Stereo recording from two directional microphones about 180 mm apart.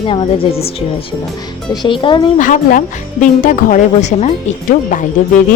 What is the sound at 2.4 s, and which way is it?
A woman's voice, 50° left (ahead or behind).